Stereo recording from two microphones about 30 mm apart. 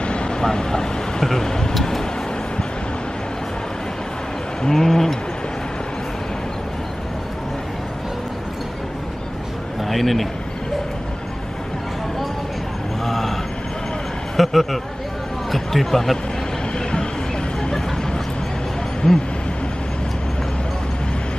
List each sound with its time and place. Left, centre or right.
0.0 s vehicle: left
0.4 s speech: centre
1.7 s vehicle: centre
4.6 s speech: centre
9.8 s a man's voice: centre
13.0 s vehicle: centre
14.3 s speech: centre
19.0 s speech: centre